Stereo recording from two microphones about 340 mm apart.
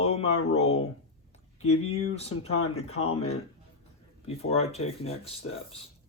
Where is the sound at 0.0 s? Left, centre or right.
Centre.